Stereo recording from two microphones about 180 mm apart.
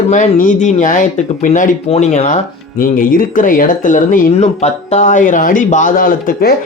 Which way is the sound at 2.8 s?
50° left (ahead or behind).